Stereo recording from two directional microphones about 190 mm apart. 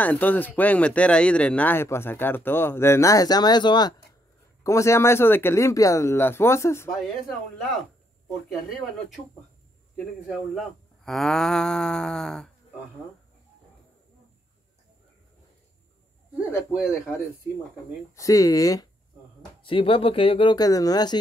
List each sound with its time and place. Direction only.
0.0 s speech: 10° left (ahead or behind)
6.9 s speech: centre (ahead or behind)
10.5 s speech: centre (ahead or behind)
16.7 s speech: 5° right (ahead or behind)
18.1 s speech: 15° left (ahead or behind)